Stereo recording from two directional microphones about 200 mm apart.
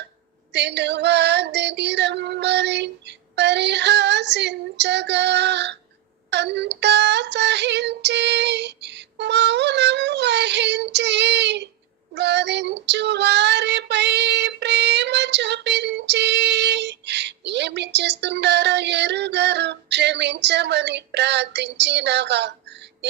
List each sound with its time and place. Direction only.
0.5 s female singing: 60° right (ahead or behind)
12.1 s child singing: 60° right (ahead or behind)